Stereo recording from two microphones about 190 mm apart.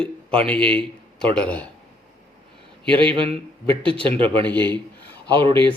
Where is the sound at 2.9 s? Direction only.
25° right (ahead or behind).